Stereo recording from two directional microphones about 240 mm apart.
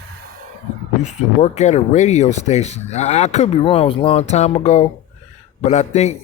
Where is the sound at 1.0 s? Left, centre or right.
Left.